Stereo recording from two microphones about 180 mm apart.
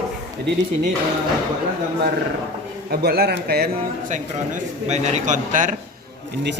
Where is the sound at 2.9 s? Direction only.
60° right (ahead or behind).